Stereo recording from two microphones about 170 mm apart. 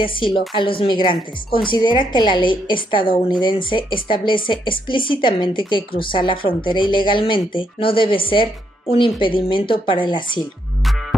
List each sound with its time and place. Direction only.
0.0 s a woman's voice: 30° left (ahead or behind)